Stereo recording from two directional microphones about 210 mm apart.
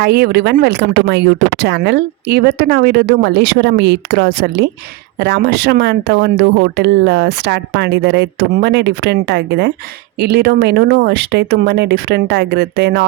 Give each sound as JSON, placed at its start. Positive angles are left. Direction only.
{"t": 0.0, "sound": "speech", "side_deg": -50}